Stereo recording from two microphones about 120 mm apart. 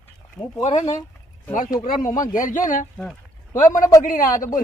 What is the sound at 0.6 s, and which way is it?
Speech, 70° left (ahead or behind).